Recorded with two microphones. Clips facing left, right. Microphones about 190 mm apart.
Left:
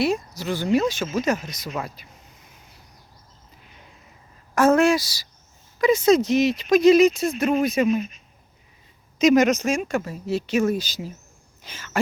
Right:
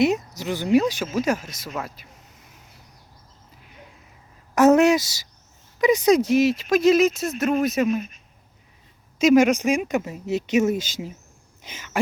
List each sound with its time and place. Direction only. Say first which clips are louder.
0.0 s speech: right 2 dB; 20° right (ahead or behind); by 2.0 s 5° right (ahead or behind)
4.5 s speech: right 2 dB; 20° right (ahead or behind); by 8.0 s centre (ahead or behind)
9.1 s speech: right 1 dB; 5° right (ahead or behind)